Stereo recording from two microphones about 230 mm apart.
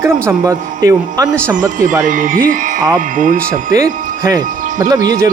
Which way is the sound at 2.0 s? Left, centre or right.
Right.